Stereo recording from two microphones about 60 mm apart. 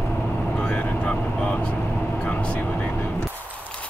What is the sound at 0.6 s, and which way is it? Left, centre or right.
Vehicle, centre.